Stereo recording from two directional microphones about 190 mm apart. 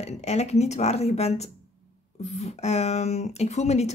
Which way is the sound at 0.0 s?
35° left (ahead or behind).